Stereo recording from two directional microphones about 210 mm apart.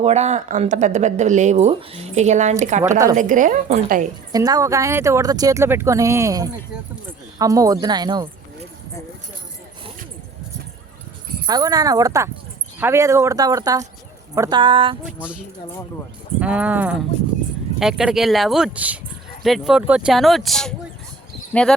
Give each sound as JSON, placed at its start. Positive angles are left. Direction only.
{"t": 0.0, "sound": "speech", "side_deg": -30}
{"t": 4.3, "sound": "speech", "side_deg": -15}
{"t": 11.4, "sound": "speech", "side_deg": -20}
{"t": 15.0, "sound": "speech", "side_deg": -5}
{"t": 16.4, "sound": "speech", "side_deg": -5}